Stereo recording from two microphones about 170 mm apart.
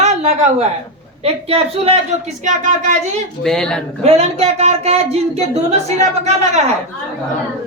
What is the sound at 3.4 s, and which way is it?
Speech, 5° left (ahead or behind).